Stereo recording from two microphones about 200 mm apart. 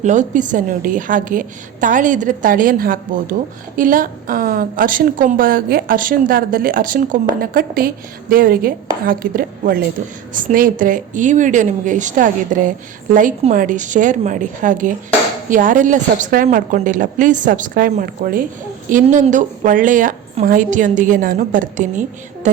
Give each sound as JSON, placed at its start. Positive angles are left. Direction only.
{"t": 0.0, "sound": "a woman's voice", "side_deg": -40}